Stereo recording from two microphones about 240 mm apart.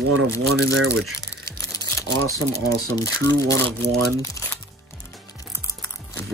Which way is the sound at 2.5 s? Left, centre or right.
Centre.